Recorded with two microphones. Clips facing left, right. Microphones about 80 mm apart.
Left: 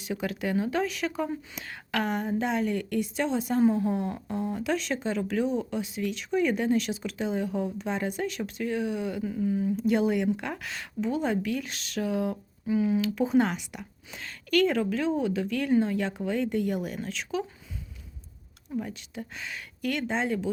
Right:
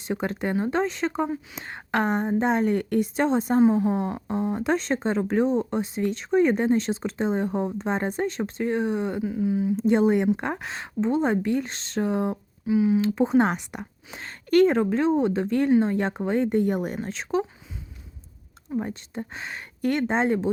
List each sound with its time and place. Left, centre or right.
0.1 s a woman's voice: right
9.2 s speech: centre
9.7 s speech: right
12.3 s speech: centre
13.0 s speech: right
18.7 s speech: right